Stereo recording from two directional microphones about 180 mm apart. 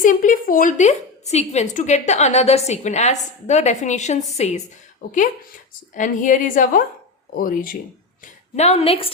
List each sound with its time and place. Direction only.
0.0 s a woman's voice: 50° left (ahead or behind)
5.9 s a woman's voice: 45° left (ahead or behind)
8.2 s a woman's voice: 35° left (ahead or behind)